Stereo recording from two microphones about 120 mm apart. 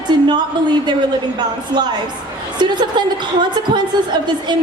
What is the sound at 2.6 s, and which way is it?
A woman's voice, 40° right (ahead or behind).